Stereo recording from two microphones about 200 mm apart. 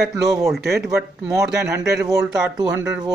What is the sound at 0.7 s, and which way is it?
Speech, 15° right (ahead or behind).